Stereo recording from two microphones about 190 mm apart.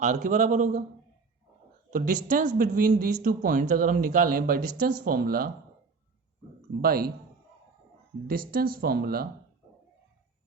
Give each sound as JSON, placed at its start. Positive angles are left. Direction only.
{"t": 0.0, "sound": "a man's voice", "side_deg": -40}
{"t": 2.2, "sound": "speech", "side_deg": -40}
{"t": 6.8, "sound": "speech", "side_deg": -50}
{"t": 8.3, "sound": "speech", "side_deg": -50}